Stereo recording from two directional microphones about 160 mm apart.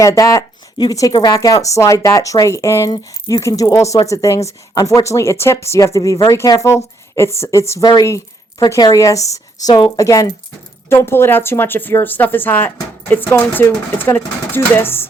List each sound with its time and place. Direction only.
0.0 s speech: 20° left (ahead or behind)